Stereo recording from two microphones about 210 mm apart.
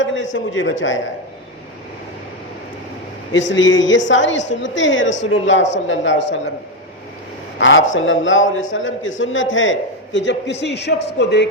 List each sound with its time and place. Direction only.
0.0 s a man's voice: 65° left (ahead or behind)
3.3 s a man's voice: 60° left (ahead or behind)
7.6 s a man's voice: 65° left (ahead or behind)